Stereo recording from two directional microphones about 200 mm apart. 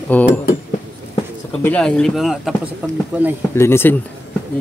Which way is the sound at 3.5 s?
10° left (ahead or behind).